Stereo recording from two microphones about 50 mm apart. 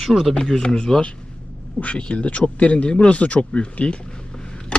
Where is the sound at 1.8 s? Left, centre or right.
Left.